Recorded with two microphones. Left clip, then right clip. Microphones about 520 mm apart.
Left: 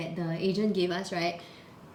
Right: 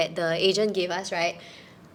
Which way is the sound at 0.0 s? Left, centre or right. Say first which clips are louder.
Right 9 dB; right.